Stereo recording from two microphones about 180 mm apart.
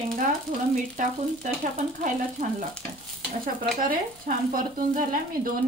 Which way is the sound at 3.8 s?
50° right (ahead or behind).